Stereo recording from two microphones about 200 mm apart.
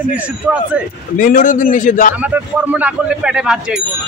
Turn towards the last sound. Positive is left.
turn(degrees=-5)  # may be behind; listen again after turning